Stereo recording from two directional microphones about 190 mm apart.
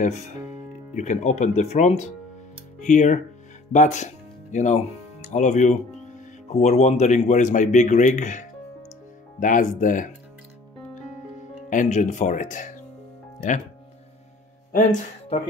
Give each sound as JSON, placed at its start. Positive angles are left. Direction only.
{"t": 0.9, "sound": "speech", "side_deg": 40}
{"t": 11.7, "sound": "speech", "side_deg": 40}
{"t": 14.7, "sound": "speech", "side_deg": 40}